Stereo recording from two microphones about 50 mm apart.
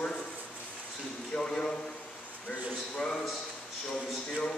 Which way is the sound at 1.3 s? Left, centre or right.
Centre.